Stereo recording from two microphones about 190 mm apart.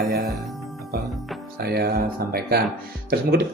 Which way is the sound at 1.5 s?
55° right (ahead or behind).